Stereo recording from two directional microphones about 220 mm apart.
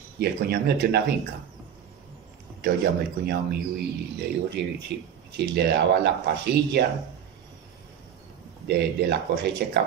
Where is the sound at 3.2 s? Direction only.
45° right (ahead or behind).